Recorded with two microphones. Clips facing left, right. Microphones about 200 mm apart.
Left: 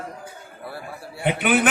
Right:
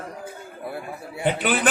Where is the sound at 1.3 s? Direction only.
60° left (ahead or behind).